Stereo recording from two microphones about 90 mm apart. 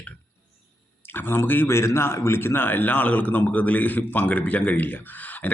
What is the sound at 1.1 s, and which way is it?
A man's voice, 25° left (ahead or behind).